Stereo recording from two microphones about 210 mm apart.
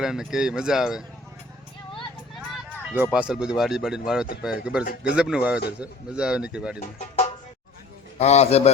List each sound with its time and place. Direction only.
0.0 s speech: centre (ahead or behind)
2.9 s speech: 5° right (ahead or behind)
6.7 s a man's voice: 30° left (ahead or behind)